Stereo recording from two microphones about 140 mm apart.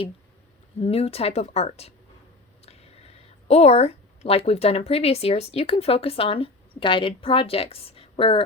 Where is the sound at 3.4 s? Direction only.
50° left (ahead or behind).